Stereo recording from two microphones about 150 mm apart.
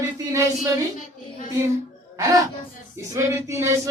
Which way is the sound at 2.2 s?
20° right (ahead or behind).